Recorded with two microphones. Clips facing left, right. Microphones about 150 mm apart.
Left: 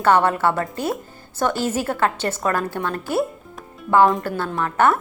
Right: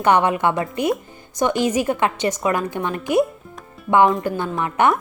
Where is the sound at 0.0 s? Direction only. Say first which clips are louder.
Even; 15° right (ahead or behind).